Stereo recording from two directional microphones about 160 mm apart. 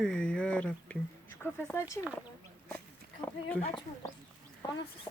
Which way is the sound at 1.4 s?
15° left (ahead or behind).